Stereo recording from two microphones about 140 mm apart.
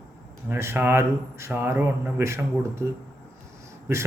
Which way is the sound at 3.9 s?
20° right (ahead or behind).